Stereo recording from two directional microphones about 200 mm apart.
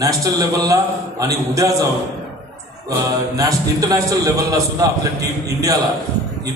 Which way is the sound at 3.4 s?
15° right (ahead or behind).